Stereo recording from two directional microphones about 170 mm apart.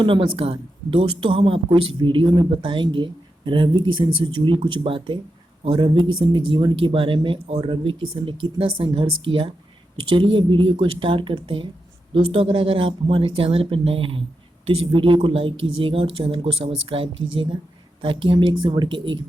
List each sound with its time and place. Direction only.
0.0 s speech: 30° right (ahead or behind)